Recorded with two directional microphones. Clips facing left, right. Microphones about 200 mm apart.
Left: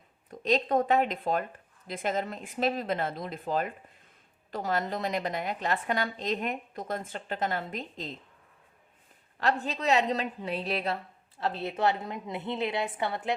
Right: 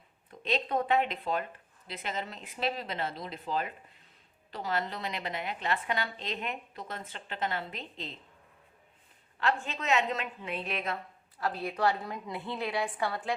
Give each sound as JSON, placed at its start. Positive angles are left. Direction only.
{"t": 0.3, "sound": "a woman's voice", "side_deg": 45}
{"t": 9.4, "sound": "a woman's voice", "side_deg": 40}